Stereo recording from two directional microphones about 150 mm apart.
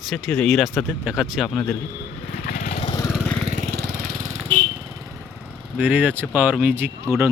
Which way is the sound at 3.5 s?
70° right (ahead or behind).